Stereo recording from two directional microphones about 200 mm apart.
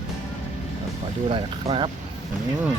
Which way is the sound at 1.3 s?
25° right (ahead or behind).